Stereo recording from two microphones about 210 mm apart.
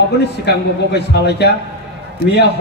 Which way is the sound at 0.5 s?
50° left (ahead or behind).